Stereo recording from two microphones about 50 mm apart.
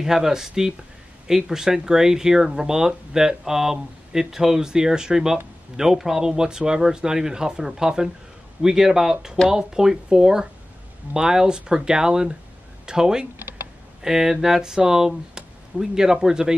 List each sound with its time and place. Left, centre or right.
0.0 s speech: centre
13.4 s computer keyboard: right
14.0 s speech: centre